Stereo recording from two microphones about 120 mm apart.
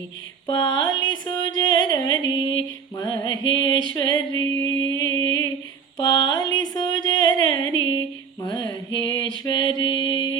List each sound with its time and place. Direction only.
0.4 s music: 30° left (ahead or behind)
9.4 s mantra: 40° left (ahead or behind)